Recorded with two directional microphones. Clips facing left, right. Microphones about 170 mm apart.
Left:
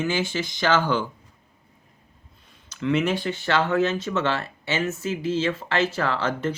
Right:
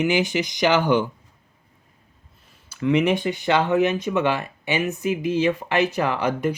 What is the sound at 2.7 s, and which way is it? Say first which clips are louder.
Speech: right 3 dB; 15° right (ahead or behind).